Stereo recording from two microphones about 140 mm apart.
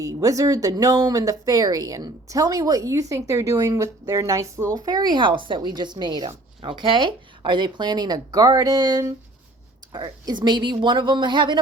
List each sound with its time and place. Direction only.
0.0 s speech: 25° right (ahead or behind)